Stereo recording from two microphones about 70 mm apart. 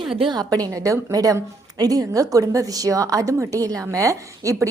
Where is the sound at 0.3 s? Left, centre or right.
Right.